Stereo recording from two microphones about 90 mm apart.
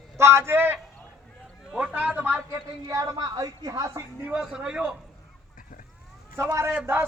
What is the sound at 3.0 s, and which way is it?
Speech, 50° right (ahead or behind).